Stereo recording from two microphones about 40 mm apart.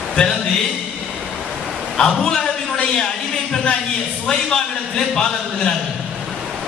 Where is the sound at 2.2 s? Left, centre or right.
Centre.